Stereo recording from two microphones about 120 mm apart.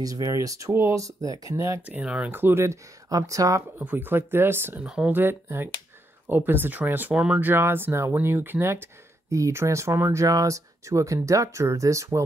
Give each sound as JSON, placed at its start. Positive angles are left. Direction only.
{"t": 0.0, "sound": "speech", "side_deg": -30}
{"t": 1.9, "sound": "speech", "side_deg": -10}
{"t": 3.7, "sound": "speech", "side_deg": -15}
{"t": 4.8, "sound": "speech", "side_deg": -5}
{"t": 5.1, "sound": "speech", "side_deg": -20}